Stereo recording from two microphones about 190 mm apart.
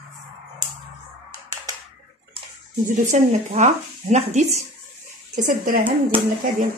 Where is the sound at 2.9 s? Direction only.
40° right (ahead or behind).